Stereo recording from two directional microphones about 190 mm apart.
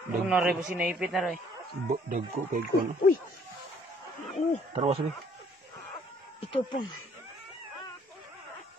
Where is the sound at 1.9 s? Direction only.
45° right (ahead or behind).